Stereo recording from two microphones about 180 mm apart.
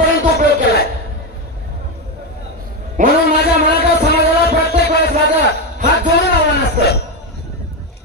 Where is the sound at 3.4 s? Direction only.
60° left (ahead or behind).